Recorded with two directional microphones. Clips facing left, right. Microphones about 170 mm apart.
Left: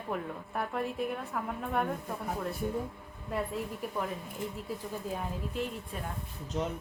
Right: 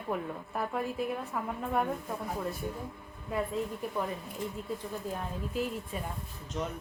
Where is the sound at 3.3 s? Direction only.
Centre (ahead or behind).